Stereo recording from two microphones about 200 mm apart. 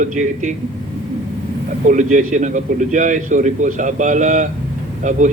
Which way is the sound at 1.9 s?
40° right (ahead or behind).